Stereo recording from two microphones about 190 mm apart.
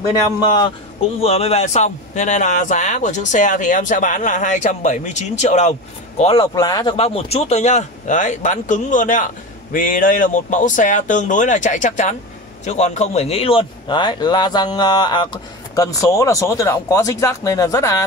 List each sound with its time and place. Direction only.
1.2 s speech: 30° left (ahead or behind)
6.5 s a man's voice: 20° left (ahead or behind)